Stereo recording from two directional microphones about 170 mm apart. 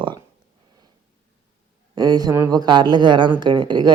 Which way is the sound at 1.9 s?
25° right (ahead or behind).